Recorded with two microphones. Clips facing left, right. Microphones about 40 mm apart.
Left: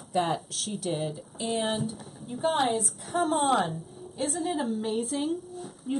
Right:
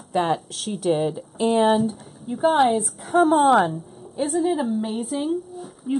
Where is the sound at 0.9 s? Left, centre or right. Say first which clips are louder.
Right 9 dB; right.